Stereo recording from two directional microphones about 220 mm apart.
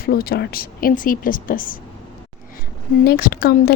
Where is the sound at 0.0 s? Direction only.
45° left (ahead or behind).